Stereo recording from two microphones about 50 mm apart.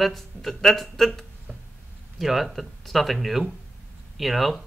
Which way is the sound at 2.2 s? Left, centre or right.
Centre.